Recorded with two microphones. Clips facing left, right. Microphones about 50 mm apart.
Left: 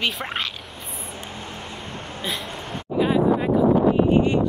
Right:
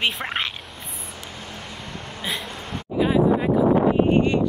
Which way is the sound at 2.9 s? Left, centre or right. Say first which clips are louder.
Even; centre.